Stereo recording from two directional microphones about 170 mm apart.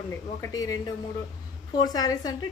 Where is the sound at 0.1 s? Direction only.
20° left (ahead or behind).